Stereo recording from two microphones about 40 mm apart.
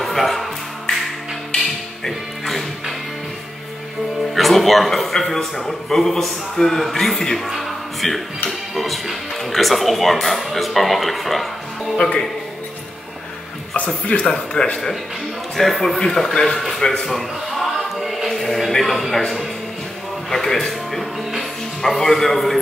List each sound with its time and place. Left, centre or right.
0.0 s speech: centre
1.6 s music: centre
4.4 s a man's voice: centre
7.3 s music: centre
10.2 s a man's voice: centre
13.7 s speech: left
15.5 s a man's voice: centre
17.0 s a sound: centre
18.3 s a man's voice: centre